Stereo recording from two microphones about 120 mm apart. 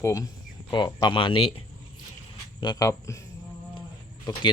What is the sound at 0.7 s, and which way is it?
Speech, 35° left (ahead or behind).